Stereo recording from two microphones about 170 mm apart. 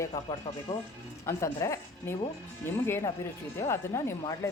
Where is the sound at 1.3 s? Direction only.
15° left (ahead or behind).